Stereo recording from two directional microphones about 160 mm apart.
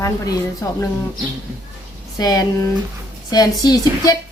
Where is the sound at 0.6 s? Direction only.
20° left (ahead or behind).